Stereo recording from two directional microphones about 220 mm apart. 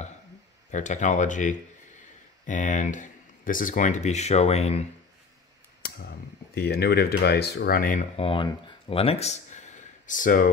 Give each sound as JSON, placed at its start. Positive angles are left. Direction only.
{"t": 0.7, "sound": "speech", "side_deg": 35}
{"t": 5.8, "sound": "speech", "side_deg": 45}
{"t": 8.2, "sound": "speech", "side_deg": 25}